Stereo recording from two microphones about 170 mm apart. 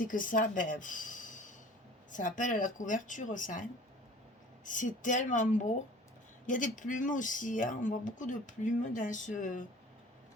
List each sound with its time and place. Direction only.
0.0 s speech: 50° left (ahead or behind)